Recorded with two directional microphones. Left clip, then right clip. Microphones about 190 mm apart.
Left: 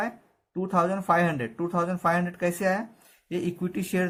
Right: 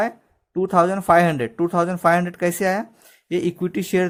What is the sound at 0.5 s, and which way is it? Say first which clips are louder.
Speech: right 8 dB; 50° right (ahead or behind).